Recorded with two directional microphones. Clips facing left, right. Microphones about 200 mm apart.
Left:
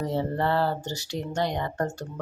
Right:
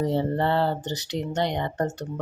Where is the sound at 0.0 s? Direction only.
25° right (ahead or behind).